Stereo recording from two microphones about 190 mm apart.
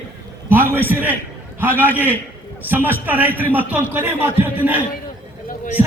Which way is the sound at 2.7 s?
10° right (ahead or behind).